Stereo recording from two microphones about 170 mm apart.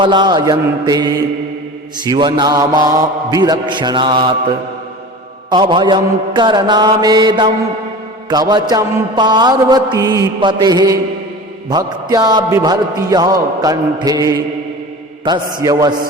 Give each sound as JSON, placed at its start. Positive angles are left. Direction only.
{"t": 0.0, "sound": "mantra", "side_deg": -25}
{"t": 5.5, "sound": "mantra", "side_deg": -30}
{"t": 15.2, "sound": "a man's voice", "side_deg": -25}
{"t": 15.6, "sound": "mantra", "side_deg": -25}